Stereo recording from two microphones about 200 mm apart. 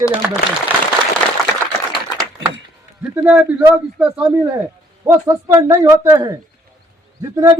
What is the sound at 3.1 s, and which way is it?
A man's voice, 10° right (ahead or behind).